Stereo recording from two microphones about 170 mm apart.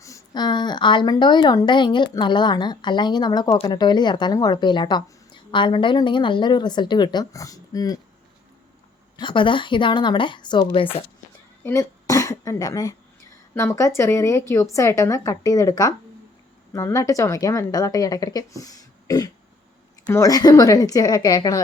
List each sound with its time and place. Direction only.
0.0 s speech: 20° left (ahead or behind)
9.1 s speech: 30° left (ahead or behind)
11.6 s a woman's voice: 20° left (ahead or behind)